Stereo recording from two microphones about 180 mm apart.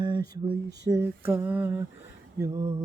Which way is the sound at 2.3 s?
15° right (ahead or behind).